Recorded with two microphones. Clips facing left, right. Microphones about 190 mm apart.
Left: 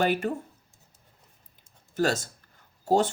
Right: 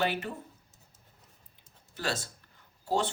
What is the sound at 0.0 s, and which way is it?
Speech, 45° left (ahead or behind).